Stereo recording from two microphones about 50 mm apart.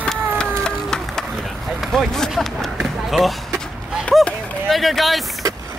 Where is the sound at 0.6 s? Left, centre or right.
Centre.